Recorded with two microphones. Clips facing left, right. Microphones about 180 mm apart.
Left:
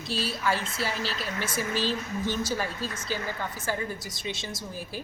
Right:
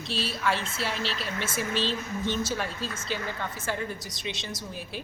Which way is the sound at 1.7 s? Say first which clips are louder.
Left 1 dB; 25° right (ahead or behind).